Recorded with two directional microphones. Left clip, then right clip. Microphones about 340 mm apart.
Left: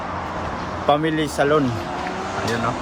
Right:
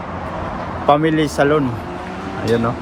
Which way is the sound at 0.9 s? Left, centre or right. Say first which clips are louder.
Right 5 dB; centre.